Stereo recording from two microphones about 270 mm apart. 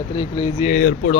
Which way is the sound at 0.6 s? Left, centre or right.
Left.